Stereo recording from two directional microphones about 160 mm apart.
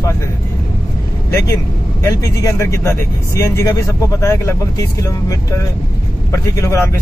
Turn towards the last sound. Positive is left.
turn(degrees=15)  # may be behind; listen again after turning